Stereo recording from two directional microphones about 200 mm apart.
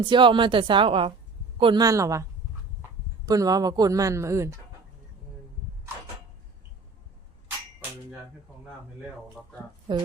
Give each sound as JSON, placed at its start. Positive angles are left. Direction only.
{"t": 0.0, "sound": "a woman's voice", "side_deg": -25}
{"t": 3.2, "sound": "speech", "side_deg": -20}